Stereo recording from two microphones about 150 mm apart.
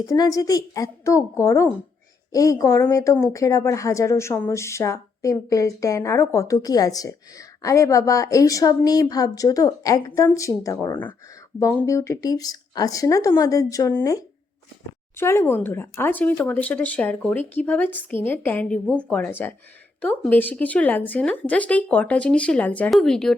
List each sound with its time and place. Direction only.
0.0 s speech: 25° left (ahead or behind)
11.5 s speech: 10° left (ahead or behind)
11.9 s speech: 20° left (ahead or behind); by 23.3 s 5° left (ahead or behind)